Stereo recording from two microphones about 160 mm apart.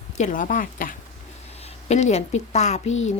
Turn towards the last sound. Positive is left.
turn(degrees=45)  # may be behind; listen again after turning